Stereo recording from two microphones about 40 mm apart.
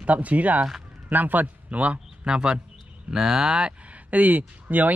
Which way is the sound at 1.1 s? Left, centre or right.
Right.